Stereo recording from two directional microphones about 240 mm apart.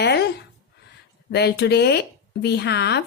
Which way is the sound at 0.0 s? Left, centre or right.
Left.